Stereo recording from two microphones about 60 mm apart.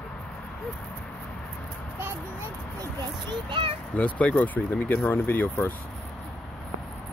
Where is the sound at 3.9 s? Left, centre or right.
Left.